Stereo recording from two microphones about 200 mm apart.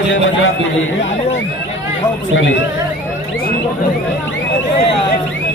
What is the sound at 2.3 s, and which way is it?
Speech, 70° left (ahead or behind).